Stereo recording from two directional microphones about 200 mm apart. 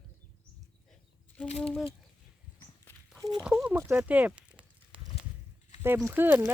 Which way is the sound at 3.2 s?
20° right (ahead or behind).